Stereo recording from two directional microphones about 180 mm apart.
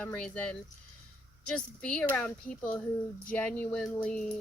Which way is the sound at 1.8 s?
5° left (ahead or behind).